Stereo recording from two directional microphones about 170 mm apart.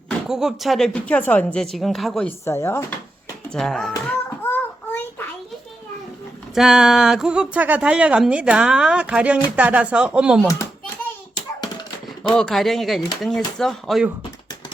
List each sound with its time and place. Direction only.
0.3 s a woman's voice: 5° right (ahead or behind)
2.4 s speech: 15° left (ahead or behind)
3.5 s child singing: centre (ahead or behind)
6.5 s a woman's voice: 5° right (ahead or behind)
12.3 s a woman's voice: 5° left (ahead or behind)